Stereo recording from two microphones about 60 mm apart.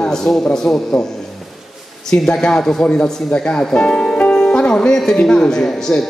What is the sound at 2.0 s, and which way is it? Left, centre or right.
Speech, centre.